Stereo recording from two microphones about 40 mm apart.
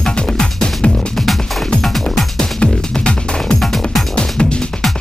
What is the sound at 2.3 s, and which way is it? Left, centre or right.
Music, left.